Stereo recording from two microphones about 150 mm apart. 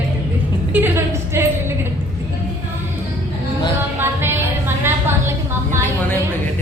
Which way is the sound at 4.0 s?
15° right (ahead or behind).